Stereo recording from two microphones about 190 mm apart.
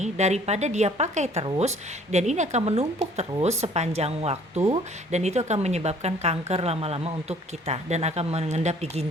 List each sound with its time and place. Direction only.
0.0 s speech: 35° right (ahead or behind)